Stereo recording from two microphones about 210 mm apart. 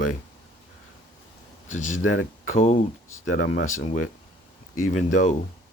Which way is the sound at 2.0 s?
80° left.